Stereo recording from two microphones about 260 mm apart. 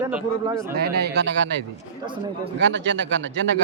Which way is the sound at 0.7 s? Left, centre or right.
Right.